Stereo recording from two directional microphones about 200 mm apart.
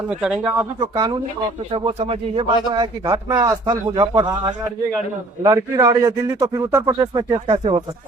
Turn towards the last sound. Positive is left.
turn(degrees=-25)  # may be behind; listen again after turning